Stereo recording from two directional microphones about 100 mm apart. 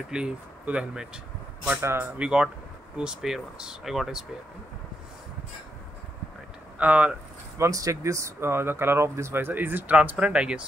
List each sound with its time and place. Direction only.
0.1 s speech: 10° right (ahead or behind)
1.8 s speech: 25° right (ahead or behind)
2.1 s speech: 10° right (ahead or behind)
6.8 s speech: 15° right (ahead or behind)
7.5 s speech: 30° right (ahead or behind); by 10.6 s 10° right (ahead or behind)